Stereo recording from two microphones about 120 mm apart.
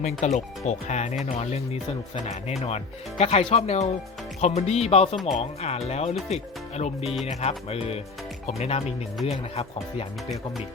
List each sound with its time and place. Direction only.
0.0 s speech: 80° left
1.2 s speech: 65° left (ahead or behind)